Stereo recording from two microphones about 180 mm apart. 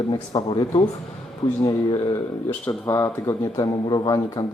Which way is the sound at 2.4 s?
10° left (ahead or behind).